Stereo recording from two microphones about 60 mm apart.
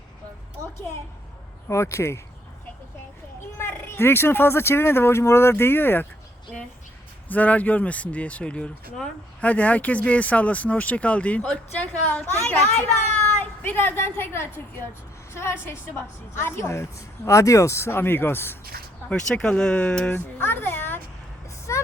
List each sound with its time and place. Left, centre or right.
1.6 s speech: left
3.6 s speech: left
7.3 s speech: left
13.4 s a sound: left
13.7 s a woman's voice: left
19.1 s speech: centre
20.1 s a sound: left
21.7 s vehicle: left